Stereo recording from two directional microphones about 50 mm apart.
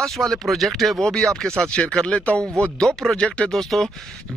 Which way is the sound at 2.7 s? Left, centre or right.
Centre.